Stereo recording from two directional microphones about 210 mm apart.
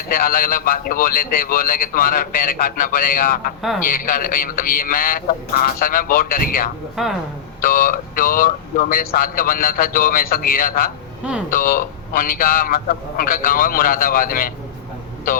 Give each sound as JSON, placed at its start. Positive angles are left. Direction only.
{"t": 0.1, "sound": "a man's voice", "side_deg": 40}
{"t": 6.9, "sound": "speech", "side_deg": 0}
{"t": 7.6, "sound": "a man's voice", "side_deg": 40}